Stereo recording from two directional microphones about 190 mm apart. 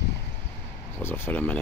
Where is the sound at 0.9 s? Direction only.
10° left (ahead or behind).